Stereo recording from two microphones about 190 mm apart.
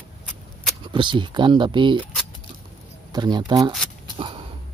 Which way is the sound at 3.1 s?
20° right (ahead or behind).